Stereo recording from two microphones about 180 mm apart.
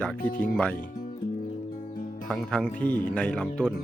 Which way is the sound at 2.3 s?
5° left (ahead or behind).